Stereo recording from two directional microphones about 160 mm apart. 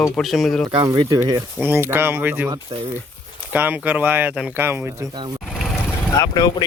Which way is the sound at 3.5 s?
10° right (ahead or behind).